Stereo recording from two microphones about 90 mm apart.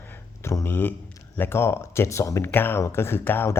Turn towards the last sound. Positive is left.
turn(degrees=25)  # may be behind; listen again after turning